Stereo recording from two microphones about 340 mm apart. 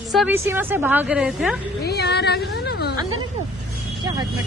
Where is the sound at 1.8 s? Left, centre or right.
Left.